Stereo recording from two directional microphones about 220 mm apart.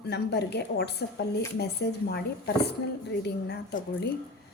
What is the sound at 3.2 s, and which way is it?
Speech, 50° left (ahead or behind).